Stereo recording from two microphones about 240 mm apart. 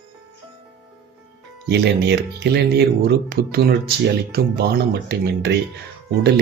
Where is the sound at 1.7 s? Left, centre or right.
Right.